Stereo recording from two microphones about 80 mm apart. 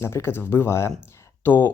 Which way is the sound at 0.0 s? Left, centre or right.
Left.